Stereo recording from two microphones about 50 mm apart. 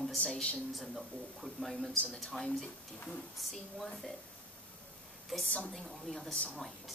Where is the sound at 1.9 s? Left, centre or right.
Left.